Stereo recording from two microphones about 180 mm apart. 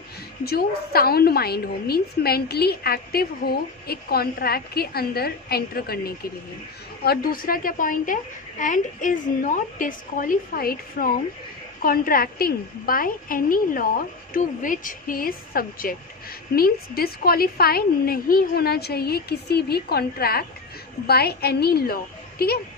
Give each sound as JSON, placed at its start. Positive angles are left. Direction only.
{"t": 0.5, "sound": "a woman's voice", "side_deg": 60}